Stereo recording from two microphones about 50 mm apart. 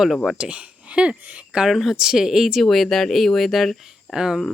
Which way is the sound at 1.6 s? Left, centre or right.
Centre.